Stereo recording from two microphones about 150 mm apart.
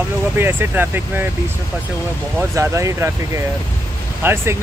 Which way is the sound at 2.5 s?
20° right (ahead or behind).